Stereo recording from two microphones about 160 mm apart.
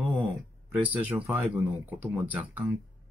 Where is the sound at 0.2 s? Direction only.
10° right (ahead or behind).